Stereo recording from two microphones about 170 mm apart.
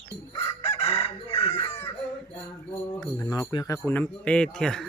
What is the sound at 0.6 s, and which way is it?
Chicken, 35° left (ahead or behind).